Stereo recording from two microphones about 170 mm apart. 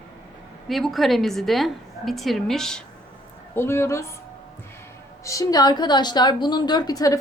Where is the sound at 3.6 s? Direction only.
15° left (ahead or behind).